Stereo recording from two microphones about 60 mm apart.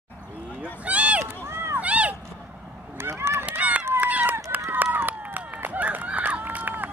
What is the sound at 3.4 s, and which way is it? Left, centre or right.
Run, right.